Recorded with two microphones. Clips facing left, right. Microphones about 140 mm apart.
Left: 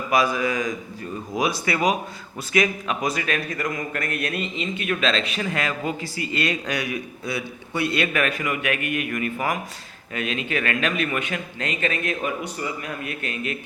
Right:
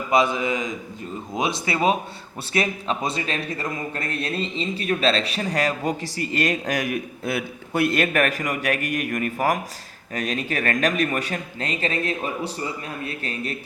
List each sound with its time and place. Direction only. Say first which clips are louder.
0.1 s a man's voice: right 1 dB; 25° right (ahead or behind)